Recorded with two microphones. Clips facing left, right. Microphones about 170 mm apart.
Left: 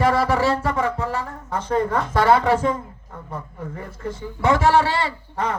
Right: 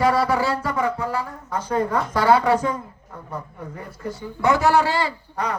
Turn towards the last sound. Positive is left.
turn(degrees=25)  # may be behind; listen again after turning